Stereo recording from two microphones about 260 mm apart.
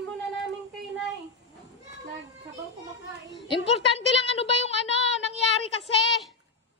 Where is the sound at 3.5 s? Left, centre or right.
Left.